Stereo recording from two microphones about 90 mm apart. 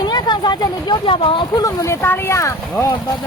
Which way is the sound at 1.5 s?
40° left (ahead or behind).